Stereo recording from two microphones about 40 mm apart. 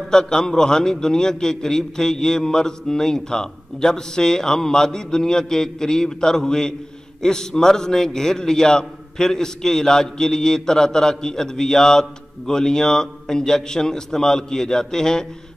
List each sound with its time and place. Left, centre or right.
0.1 s a man's voice: centre